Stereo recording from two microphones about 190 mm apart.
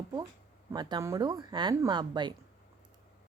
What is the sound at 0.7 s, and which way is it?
Speech, 20° right (ahead or behind).